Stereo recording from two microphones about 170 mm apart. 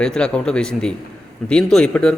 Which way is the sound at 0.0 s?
5° left (ahead or behind).